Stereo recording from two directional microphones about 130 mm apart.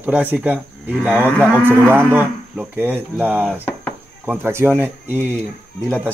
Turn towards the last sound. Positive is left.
turn(degrees=-15)  # may be behind; listen again after turning